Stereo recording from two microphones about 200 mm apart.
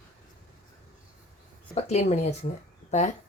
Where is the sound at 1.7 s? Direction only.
30° left (ahead or behind).